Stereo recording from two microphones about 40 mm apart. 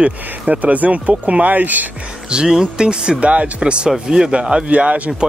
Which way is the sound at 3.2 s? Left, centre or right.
Right.